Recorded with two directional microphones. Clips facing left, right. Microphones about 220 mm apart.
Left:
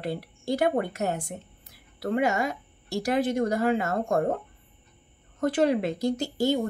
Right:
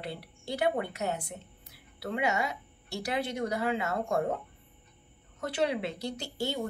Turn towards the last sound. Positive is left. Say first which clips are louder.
# left 9 dB
turn(degrees=45)  # may be behind; listen again after turning